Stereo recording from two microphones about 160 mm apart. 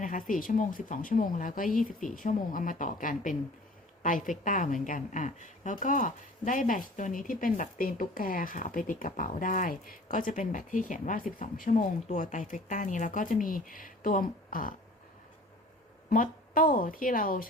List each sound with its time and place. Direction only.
0.0 s speech: 55° left (ahead or behind)
16.0 s speech: 60° left (ahead or behind)